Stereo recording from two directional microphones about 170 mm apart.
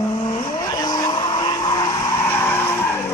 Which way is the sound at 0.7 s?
25° left (ahead or behind).